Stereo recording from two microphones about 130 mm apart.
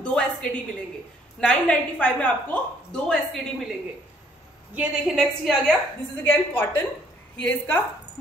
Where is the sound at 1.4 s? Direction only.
10° left (ahead or behind).